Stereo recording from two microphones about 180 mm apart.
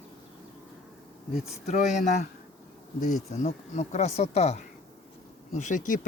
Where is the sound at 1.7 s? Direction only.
40° left (ahead or behind).